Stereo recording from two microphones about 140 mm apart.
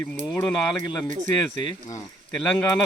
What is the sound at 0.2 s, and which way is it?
Speech, 10° left (ahead or behind).